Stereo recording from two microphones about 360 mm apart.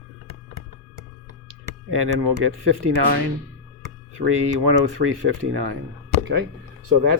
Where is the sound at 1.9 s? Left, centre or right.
Right.